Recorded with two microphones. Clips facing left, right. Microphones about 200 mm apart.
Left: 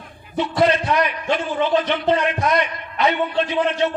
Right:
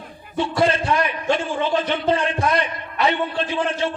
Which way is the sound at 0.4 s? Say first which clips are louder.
Left 2 dB; 30° right (ahead or behind).